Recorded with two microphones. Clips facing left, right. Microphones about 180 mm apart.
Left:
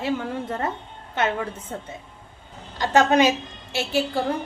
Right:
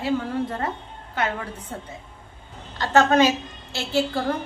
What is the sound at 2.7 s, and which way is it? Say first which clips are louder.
A woman's voice: even; 15° left (ahead or behind).